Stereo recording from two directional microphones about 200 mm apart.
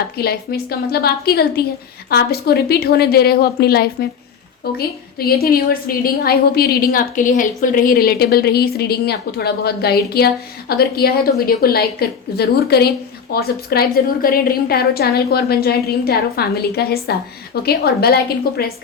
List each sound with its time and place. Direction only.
0.2 s a woman's voice: 50° left (ahead or behind)
5.2 s a woman's voice: 50° left (ahead or behind)